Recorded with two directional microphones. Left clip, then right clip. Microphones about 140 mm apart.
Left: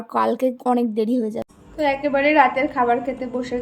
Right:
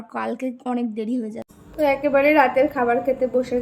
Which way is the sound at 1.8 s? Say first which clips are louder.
Right 1 dB; 20° right (ahead or behind).